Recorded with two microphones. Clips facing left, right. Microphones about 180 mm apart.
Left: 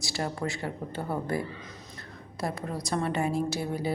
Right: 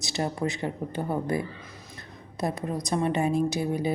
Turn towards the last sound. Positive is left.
turn(degrees=-20)  # may be behind; listen again after turning